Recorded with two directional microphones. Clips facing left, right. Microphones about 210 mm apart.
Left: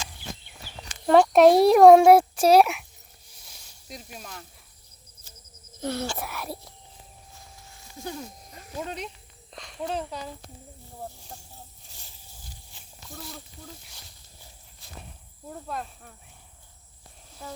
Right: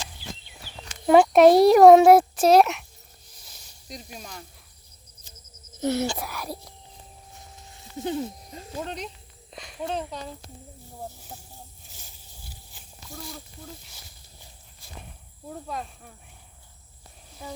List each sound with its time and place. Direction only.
1.0 s speech: 10° right (ahead or behind)
2.4 s speech: 10° left (ahead or behind)
3.4 s snake: 5° left (ahead or behind)
5.8 s a sound: 20° right (ahead or behind)
6.1 s speech: centre (ahead or behind)
7.7 s a sound: 20° right (ahead or behind)
8.8 s speech: 5° left (ahead or behind)
13.1 s speech: centre (ahead or behind)
15.4 s speech: centre (ahead or behind)